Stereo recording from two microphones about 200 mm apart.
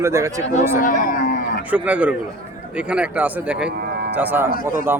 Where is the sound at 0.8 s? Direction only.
40° left (ahead or behind).